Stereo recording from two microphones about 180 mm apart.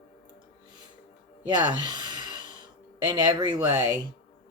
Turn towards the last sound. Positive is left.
turn(degrees=-20)  # may be behind; listen again after turning